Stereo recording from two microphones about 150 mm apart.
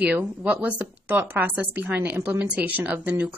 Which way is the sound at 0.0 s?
10° right (ahead or behind).